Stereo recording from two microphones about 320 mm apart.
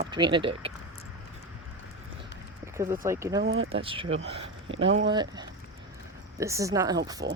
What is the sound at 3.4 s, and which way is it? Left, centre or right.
Speech, right.